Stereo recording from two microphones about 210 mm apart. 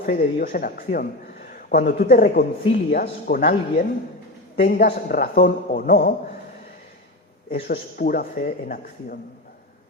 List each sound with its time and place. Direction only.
0.0 s a man's voice: 45° left (ahead or behind)
7.5 s a man's voice: 45° left (ahead or behind)